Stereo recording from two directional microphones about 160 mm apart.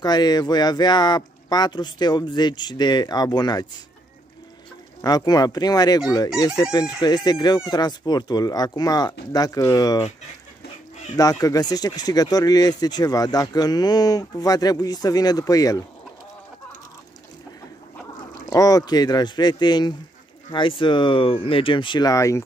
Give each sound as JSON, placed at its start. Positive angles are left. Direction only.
{"t": 0.0, "sound": "speech", "side_deg": 25}
{"t": 5.0, "sound": "speech", "side_deg": 25}
{"t": 11.1, "sound": "speech", "side_deg": 20}
{"t": 18.5, "sound": "speech", "side_deg": 20}